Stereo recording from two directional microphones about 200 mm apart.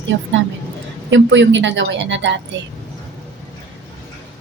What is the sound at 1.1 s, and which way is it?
A woman's voice, 65° right (ahead or behind).